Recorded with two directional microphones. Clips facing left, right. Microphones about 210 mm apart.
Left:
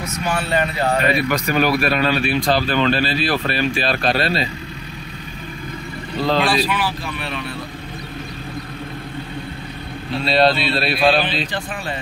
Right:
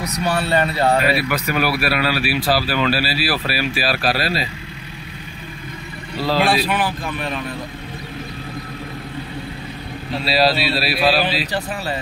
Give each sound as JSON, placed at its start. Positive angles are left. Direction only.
{"t": 0.0, "sound": "a man's voice", "side_deg": -35}
{"t": 1.0, "sound": "speech", "side_deg": -5}
{"t": 6.4, "sound": "speech", "side_deg": -55}
{"t": 10.2, "sound": "speech", "side_deg": -5}